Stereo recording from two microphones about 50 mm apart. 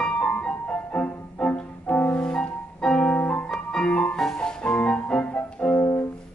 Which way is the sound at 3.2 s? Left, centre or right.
Left.